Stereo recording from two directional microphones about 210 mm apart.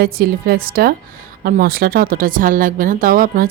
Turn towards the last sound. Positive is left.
turn(degrees=-40)  # may be behind; listen again after turning